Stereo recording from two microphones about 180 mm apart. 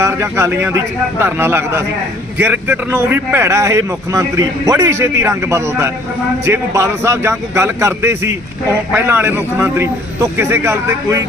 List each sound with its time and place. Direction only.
0.0 s speech: 15° right (ahead or behind)